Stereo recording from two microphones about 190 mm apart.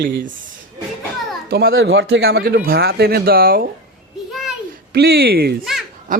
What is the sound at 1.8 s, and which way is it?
Speech, 70° right (ahead or behind).